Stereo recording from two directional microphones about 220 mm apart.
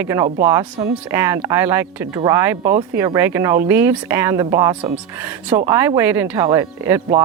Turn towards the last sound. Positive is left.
turn(degrees=-10)  # may be behind; listen again after turning